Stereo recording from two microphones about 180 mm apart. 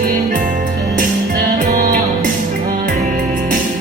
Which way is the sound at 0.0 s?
50° right (ahead or behind).